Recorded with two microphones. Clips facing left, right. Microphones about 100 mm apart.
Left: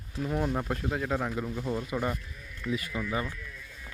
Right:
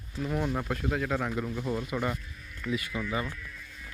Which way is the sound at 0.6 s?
25° left (ahead or behind).